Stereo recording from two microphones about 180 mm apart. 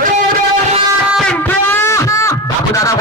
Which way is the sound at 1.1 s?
5° left (ahead or behind).